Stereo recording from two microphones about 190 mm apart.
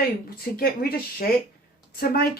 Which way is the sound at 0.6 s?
55° left (ahead or behind).